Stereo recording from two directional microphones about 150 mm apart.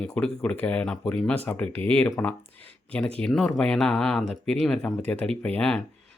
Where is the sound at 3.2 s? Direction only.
5° left (ahead or behind).